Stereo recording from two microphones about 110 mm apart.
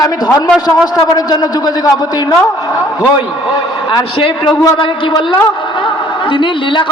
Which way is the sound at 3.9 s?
50° left (ahead or behind).